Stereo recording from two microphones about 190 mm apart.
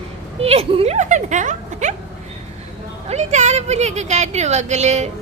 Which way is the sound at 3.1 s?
35° right (ahead or behind).